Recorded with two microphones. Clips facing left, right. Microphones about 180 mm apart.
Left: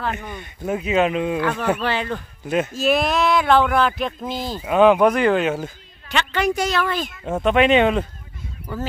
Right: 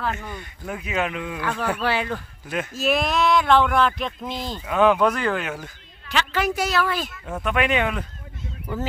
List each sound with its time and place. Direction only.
0.1 s speech: 20° left (ahead or behind)
1.8 s speech: 10° right (ahead or behind)
2.1 s speech: 20° left (ahead or behind)
2.7 s a sound: centre (ahead or behind)
4.6 s speech: 20° left (ahead or behind)
6.0 s a sound: 5° right (ahead or behind)
7.2 s speech: 25° left (ahead or behind)